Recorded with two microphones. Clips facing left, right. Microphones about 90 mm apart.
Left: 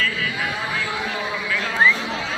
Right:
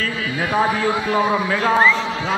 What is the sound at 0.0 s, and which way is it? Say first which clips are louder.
Speech: right 1 dB; 40° right (ahead or behind).